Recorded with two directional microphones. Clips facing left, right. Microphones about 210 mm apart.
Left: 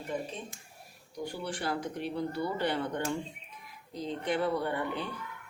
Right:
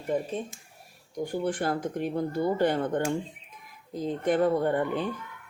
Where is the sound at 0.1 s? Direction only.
50° right (ahead or behind).